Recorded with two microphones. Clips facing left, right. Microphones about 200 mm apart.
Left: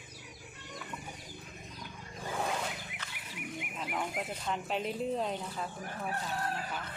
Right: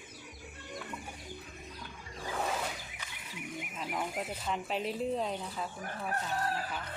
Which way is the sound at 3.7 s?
Centre (ahead or behind).